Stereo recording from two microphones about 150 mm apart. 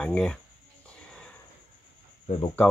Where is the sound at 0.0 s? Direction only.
5° left (ahead or behind).